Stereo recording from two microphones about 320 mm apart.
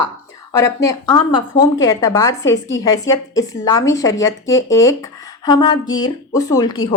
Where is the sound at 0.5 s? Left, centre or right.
Centre.